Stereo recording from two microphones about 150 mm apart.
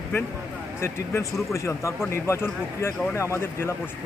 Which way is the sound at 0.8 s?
15° left (ahead or behind).